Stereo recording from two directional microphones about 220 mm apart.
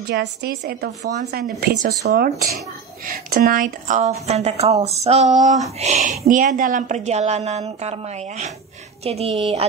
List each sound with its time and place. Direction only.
0.1 s a woman's voice: 50° right (ahead or behind); by 9.3 s 30° right (ahead or behind)